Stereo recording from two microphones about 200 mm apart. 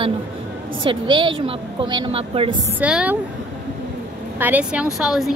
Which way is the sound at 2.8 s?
5° right (ahead or behind).